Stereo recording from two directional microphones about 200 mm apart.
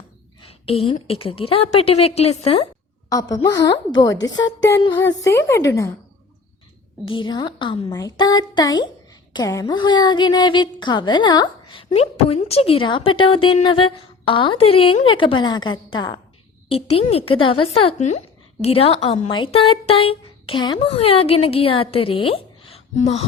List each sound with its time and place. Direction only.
0.4 s a woman's voice: 30° left (ahead or behind)
7.1 s speech: 25° left (ahead or behind)